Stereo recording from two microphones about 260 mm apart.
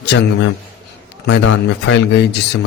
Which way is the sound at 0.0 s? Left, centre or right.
Left.